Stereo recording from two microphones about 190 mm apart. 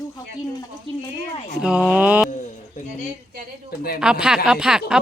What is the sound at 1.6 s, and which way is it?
Speech, 5° right (ahead or behind).